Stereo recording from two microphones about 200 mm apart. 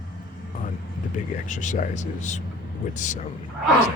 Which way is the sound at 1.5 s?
40° left (ahead or behind).